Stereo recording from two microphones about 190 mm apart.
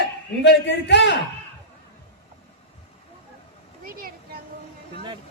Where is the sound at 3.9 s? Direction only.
50° right (ahead or behind).